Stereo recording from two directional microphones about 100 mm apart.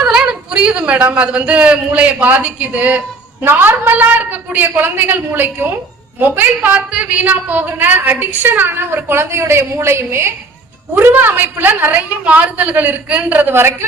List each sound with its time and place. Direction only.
0.0 s a man's voice: 10° right (ahead or behind)